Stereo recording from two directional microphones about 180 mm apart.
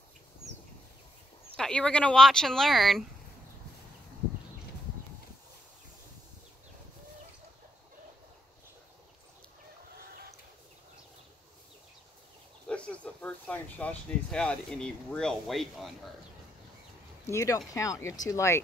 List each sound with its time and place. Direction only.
1.6 s speech: 5° left (ahead or behind)
12.6 s speech: 5° left (ahead or behind)
17.3 s speech: 15° left (ahead or behind)